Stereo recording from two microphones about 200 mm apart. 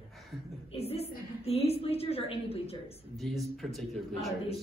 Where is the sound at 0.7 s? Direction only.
30° left (ahead or behind).